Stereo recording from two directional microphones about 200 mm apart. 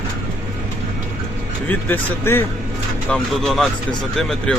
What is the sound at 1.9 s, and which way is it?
Speech, 10° left (ahead or behind).